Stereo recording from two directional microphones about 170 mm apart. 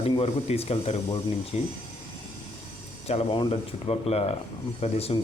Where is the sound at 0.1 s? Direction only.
35° left (ahead or behind).